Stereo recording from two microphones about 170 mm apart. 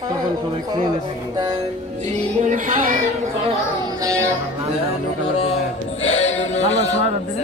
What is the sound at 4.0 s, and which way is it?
Music, 20° right (ahead or behind).